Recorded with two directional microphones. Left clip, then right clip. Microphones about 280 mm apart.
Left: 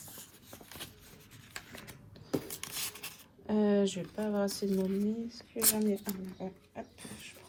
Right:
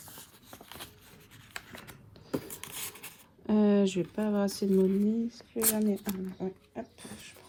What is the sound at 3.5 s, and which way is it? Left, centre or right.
Speech, right.